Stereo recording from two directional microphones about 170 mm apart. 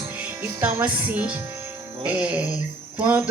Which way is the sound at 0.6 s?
10° right (ahead or behind).